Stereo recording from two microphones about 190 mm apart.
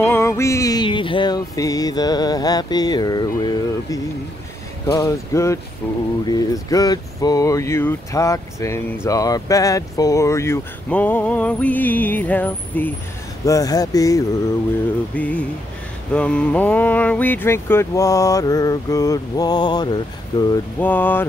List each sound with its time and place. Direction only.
0.0 s music: 10° left (ahead or behind)
4.8 s speech: 15° left (ahead or behind)
6.2 s speech: 20° left (ahead or behind)
13.5 s music: 20° left (ahead or behind)
15.1 s speech: 10° left (ahead or behind)
20.8 s speech: 10° left (ahead or behind)